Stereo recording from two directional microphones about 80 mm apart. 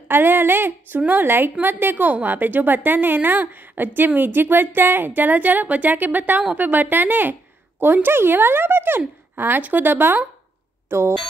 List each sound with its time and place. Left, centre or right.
0.1 s a woman's voice: right